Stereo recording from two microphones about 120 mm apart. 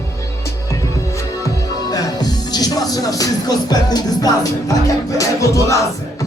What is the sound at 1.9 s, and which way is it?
Music, 35° left (ahead or behind).